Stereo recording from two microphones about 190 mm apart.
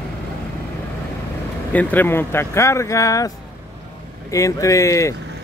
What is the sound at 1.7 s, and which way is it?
Speech, 10° left (ahead or behind).